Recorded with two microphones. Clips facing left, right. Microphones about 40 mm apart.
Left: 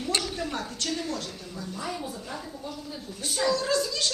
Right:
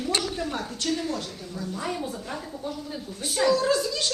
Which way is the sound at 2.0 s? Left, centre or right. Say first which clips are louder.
Right 3 dB; right.